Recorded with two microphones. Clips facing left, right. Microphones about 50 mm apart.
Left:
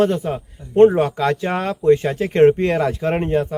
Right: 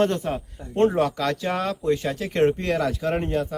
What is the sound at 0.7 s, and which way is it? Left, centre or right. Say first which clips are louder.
Speech: left 8 dB; left.